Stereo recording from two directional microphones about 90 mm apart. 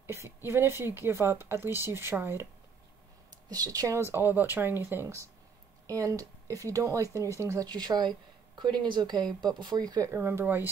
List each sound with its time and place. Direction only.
0.0 s speech: 25° right (ahead or behind)
3.4 s speech: 45° right (ahead or behind)
7.6 s speech: 50° right (ahead or behind); by 10.7 s 20° right (ahead or behind)